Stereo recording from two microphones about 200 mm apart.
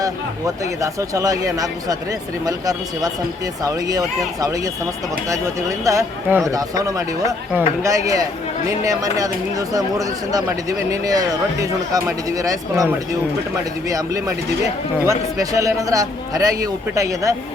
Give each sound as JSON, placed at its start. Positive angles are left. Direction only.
{"t": 0.8, "sound": "speech", "side_deg": -15}